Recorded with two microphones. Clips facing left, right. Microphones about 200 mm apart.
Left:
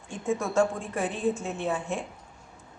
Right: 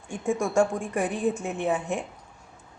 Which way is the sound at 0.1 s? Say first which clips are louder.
Right 2 dB; 15° right (ahead or behind).